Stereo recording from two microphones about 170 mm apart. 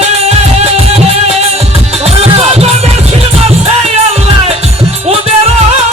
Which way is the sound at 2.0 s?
35° right (ahead or behind).